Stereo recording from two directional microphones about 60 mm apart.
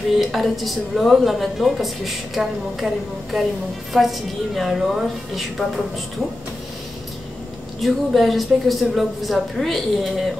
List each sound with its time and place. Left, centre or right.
0.2 s a woman's voice: centre
7.8 s a woman's voice: centre